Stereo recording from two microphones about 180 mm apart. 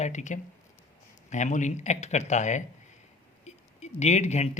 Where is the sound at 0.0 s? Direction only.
40° left (ahead or behind).